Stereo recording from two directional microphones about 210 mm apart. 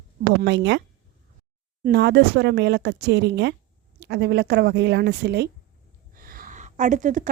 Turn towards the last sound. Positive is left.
turn(degrees=-35)  # may be behind; listen again after turning